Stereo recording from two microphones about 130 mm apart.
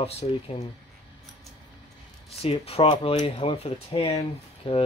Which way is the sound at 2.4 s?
50° left (ahead or behind).